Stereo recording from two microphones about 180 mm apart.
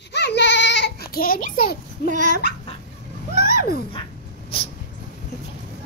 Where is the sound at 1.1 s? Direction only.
50° left (ahead or behind).